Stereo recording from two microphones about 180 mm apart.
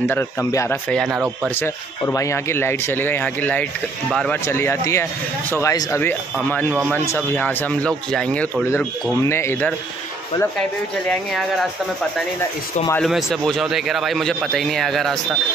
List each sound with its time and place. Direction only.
0.1 s speech: 15° left (ahead or behind)
0.8 s a man's voice: centre (ahead or behind)
1.5 s a man's voice: 10° left (ahead or behind)
4.5 s speech: 15° left (ahead or behind)
13.0 s a man's voice: centre (ahead or behind)